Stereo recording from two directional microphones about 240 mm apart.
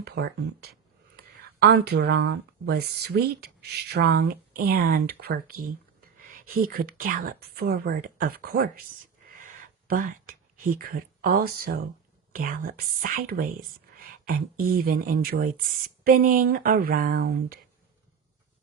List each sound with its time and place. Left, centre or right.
0.0 s speech: right